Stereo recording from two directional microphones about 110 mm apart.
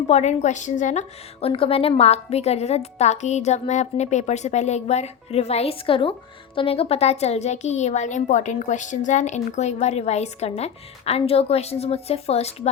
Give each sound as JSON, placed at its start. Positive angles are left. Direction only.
{"t": 0.1, "sound": "a woman's voice", "side_deg": 90}
{"t": 2.0, "sound": "a woman's voice", "side_deg": 80}